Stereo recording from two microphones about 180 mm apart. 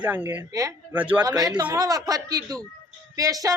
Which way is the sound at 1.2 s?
20° right (ahead or behind).